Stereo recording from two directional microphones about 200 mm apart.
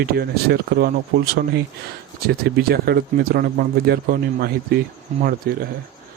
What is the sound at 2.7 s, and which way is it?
Speech, 50° right (ahead or behind).